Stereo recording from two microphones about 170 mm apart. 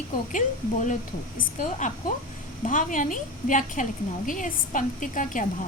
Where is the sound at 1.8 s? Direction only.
50° left (ahead or behind).